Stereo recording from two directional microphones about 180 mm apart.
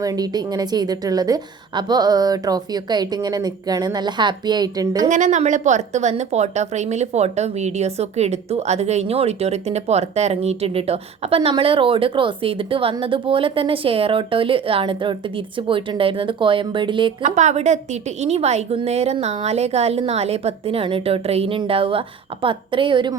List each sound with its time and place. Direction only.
0.0 s a woman's voice: 20° right (ahead or behind)
5.0 s a woman's voice: 45° right (ahead or behind); by 17.1 s 25° right (ahead or behind)
17.2 s a woman's voice: 40° right (ahead or behind)